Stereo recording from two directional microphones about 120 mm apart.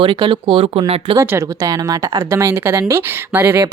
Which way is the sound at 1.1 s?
20° right (ahead or behind).